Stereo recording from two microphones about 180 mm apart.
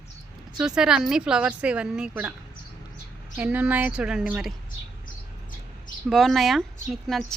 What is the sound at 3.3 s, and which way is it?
Speech, 10° right (ahead or behind).